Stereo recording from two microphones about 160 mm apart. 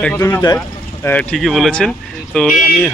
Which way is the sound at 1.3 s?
Centre (ahead or behind).